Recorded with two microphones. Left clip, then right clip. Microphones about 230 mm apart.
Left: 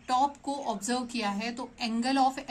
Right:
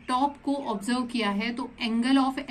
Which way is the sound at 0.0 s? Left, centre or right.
Left.